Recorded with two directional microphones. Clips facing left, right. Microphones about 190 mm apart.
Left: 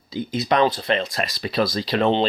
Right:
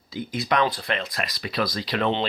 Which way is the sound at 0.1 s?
20° left (ahead or behind).